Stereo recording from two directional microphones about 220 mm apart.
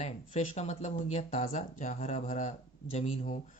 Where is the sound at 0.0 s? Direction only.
30° left (ahead or behind).